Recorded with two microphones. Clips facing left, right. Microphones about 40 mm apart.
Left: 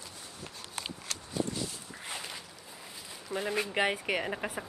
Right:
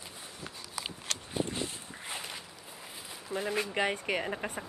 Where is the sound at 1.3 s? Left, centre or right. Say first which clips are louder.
Even; right.